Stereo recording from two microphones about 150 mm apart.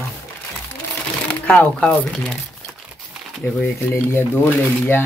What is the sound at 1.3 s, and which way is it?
Speech, 10° left (ahead or behind).